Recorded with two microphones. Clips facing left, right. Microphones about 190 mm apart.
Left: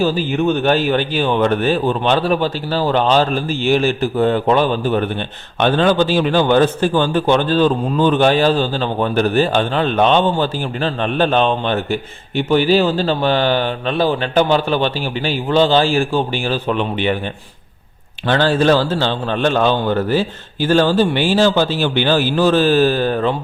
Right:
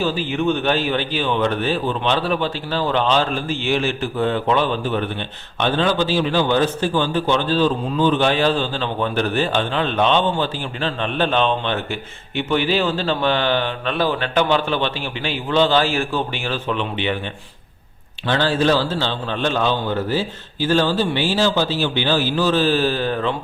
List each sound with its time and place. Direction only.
0.0 s a man's voice: 40° left (ahead or behind)
18.3 s a man's voice: 50° left (ahead or behind)